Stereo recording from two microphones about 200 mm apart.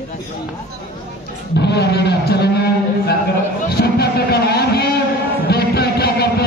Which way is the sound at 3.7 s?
50° left (ahead or behind).